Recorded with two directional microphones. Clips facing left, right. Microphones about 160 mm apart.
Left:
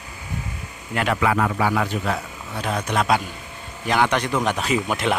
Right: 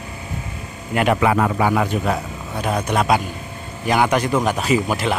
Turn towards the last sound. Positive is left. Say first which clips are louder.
# right 3 dB
turn(degrees=0)  # may be behind; listen again after turning